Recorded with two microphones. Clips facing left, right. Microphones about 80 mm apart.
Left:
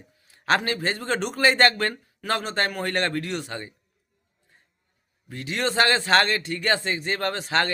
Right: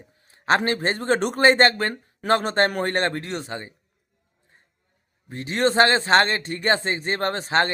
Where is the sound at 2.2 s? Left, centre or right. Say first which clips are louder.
Right 6 dB; right.